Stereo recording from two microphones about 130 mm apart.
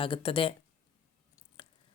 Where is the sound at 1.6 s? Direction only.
40° left (ahead or behind).